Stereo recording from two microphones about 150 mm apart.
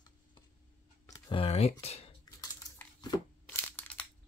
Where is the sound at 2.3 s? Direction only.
25° left (ahead or behind).